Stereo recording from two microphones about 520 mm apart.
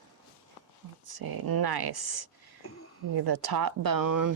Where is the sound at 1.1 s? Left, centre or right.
Right.